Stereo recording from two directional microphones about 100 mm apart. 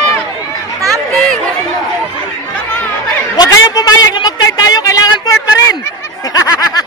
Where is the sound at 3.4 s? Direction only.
40° left (ahead or behind).